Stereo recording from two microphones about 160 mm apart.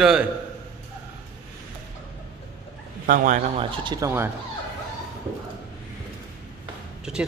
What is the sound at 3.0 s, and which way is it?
Speech, 55° right (ahead or behind).